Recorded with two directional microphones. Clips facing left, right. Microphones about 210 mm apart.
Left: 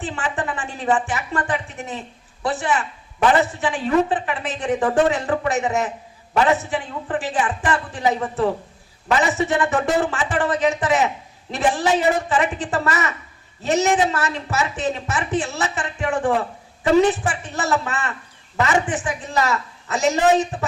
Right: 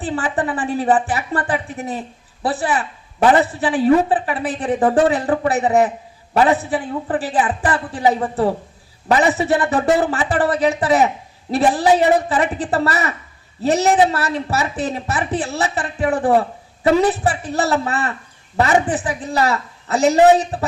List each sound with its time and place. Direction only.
0.0 s speech: 35° right (ahead or behind)